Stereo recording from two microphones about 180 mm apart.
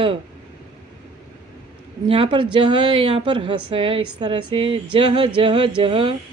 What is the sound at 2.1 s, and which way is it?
Speech, 30° right (ahead or behind).